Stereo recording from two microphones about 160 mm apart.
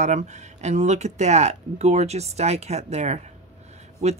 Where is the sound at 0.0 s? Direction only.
45° right (ahead or behind).